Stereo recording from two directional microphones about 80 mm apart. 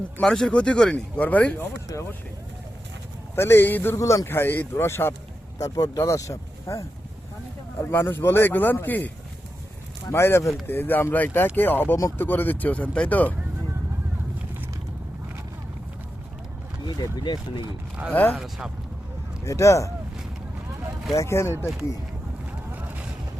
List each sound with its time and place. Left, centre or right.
0.2 s speech: centre
3.3 s speech: left
3.9 s speech: left
5.5 s speech: left
6.0 s speech: left
7.8 s speech: left
16.8 s speech: left
18.1 s speech: left
18.3 s speech: centre
19.5 s speech: left
21.1 s speech: left
22.7 s boat: right